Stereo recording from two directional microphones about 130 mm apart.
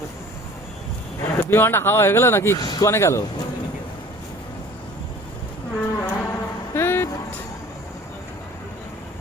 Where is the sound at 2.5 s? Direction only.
30° left (ahead or behind).